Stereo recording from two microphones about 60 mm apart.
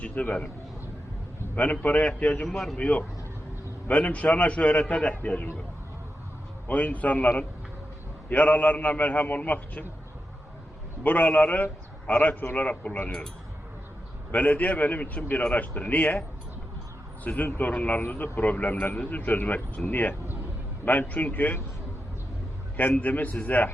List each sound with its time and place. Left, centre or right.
0.0 s a man's voice: left
1.5 s a man's voice: left
2.5 s speech: centre
2.7 s a man's voice: left
6.7 s a man's voice: left
11.0 s a man's voice: left
14.3 s a man's voice: left
17.2 s a man's voice: left
23.0 s a man's voice: left